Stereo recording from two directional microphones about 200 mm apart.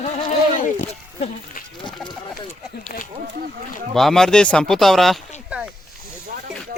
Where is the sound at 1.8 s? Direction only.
20° left (ahead or behind).